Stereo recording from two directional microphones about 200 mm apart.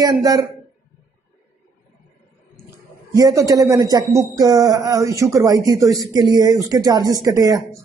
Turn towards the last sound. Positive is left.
turn(degrees=-15)  # may be behind; listen again after turning